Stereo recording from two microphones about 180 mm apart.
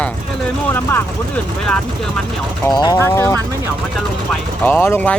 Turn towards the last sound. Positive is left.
turn(degrees=10)  # may be behind; listen again after turning